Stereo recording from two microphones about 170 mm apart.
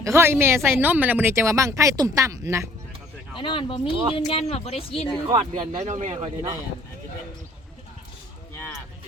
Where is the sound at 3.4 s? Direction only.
30° left (ahead or behind).